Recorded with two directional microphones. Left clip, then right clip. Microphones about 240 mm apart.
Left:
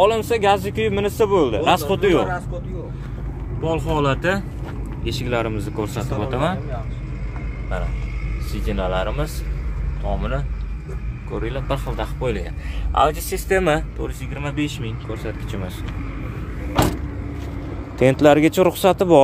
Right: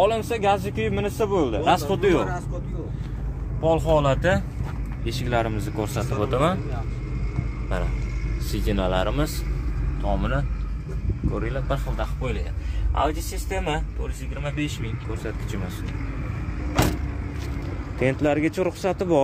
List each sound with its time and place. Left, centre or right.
0.0 s speech: centre
3.6 s speech: centre
8.6 s speech: centre
11.3 s speech: centre
11.6 s speech: centre
13.5 s speech: left
16.8 s speech: centre
17.9 s speech: left